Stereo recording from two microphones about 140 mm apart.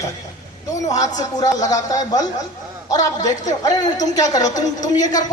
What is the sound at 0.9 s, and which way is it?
A woman's voice, 25° left (ahead or behind).